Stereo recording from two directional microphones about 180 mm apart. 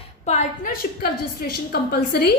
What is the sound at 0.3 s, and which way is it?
A woman's voice, 45° left (ahead or behind).